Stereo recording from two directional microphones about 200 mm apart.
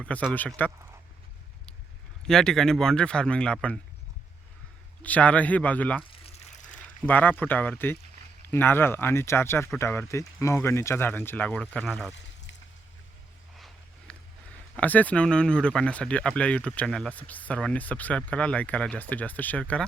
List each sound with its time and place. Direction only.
0.0 s speech: 5° left (ahead or behind)
2.2 s speech: 5° left (ahead or behind)
5.0 s speech: 5° left (ahead or behind)
6.2 s a sound: 35° left (ahead or behind)
7.0 s speech: 10° left (ahead or behind)
14.1 s a sound: 5° left (ahead or behind)
14.8 s speech: 10° left (ahead or behind)